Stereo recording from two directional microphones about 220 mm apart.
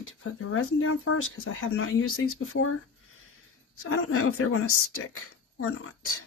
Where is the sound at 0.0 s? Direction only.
70° left (ahead or behind).